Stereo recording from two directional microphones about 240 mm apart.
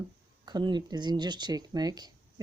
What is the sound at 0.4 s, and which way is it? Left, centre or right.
Speech, centre.